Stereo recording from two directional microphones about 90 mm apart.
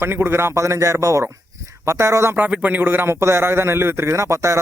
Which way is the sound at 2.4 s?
15° right (ahead or behind).